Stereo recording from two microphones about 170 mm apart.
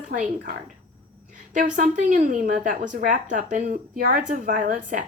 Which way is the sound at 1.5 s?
50° right (ahead or behind).